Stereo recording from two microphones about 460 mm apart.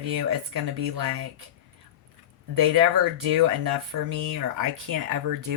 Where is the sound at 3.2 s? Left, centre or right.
Right.